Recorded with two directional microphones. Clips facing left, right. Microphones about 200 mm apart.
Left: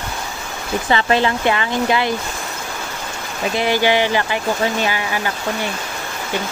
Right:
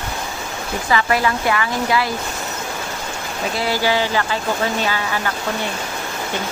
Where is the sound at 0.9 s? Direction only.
25° left (ahead or behind).